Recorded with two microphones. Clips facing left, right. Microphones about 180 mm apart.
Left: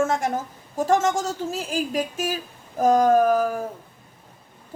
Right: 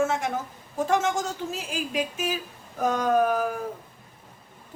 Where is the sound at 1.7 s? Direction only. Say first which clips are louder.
Left 3 dB; 45° left (ahead or behind).